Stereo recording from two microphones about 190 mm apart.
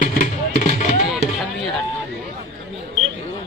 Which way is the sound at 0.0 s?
45° left (ahead or behind).